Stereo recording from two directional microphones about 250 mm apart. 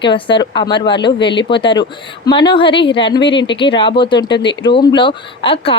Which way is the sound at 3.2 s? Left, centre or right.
Left.